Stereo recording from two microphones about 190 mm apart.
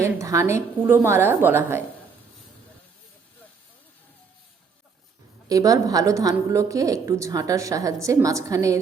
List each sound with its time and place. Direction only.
0.0 s a woman's voice: 15° right (ahead or behind)
5.5 s a woman's voice: 20° right (ahead or behind)